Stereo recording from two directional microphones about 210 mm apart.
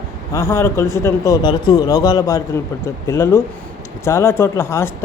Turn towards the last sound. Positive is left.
turn(degrees=10)  # may be behind; listen again after turning